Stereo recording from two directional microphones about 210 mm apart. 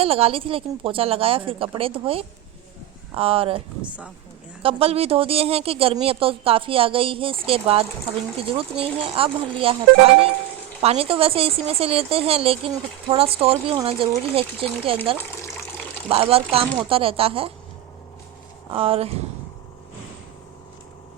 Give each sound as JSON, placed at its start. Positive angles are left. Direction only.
{"t": 0.0, "sound": "speech", "side_deg": -25}
{"t": 4.6, "sound": "speech", "side_deg": -30}
{"t": 10.8, "sound": "speech", "side_deg": -25}
{"t": 16.0, "sound": "speech", "side_deg": -25}
{"t": 18.7, "sound": "speech", "side_deg": -25}